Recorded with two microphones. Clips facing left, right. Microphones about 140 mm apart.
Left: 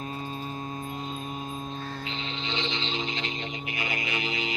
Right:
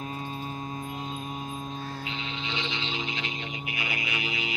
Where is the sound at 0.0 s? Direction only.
5° right (ahead or behind).